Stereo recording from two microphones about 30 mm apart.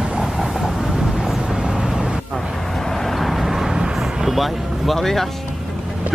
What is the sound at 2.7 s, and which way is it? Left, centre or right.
Vehicle, centre.